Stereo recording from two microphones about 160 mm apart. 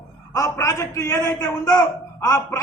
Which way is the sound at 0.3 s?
20° left (ahead or behind).